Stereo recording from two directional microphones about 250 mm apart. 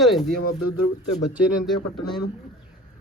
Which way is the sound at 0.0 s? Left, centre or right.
Centre.